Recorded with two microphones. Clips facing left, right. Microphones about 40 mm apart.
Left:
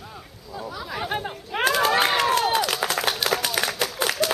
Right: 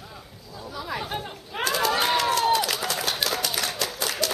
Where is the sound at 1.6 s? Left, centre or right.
Left.